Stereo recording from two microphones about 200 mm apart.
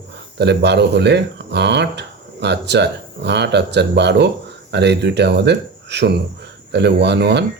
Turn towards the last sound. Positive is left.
turn(degrees=-55)  # may be behind; listen again after turning